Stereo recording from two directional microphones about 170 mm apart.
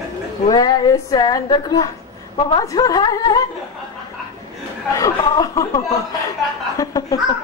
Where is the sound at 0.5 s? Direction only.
25° left (ahead or behind).